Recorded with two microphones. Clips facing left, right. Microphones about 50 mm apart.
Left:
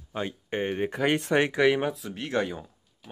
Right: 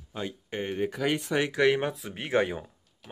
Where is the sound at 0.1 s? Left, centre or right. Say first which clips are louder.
Left 4 dB; left.